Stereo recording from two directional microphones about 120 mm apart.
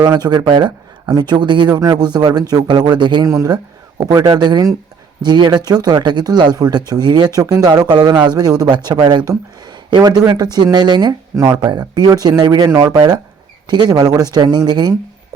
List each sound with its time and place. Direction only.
0.0 s speech: 35° right (ahead or behind)
3.2 s speech: 20° right (ahead or behind); by 11.1 s 40° right (ahead or behind)
11.3 s speech: 25° right (ahead or behind)